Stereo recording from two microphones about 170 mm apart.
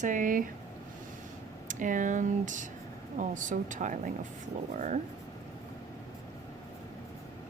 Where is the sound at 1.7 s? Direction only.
50° right (ahead or behind).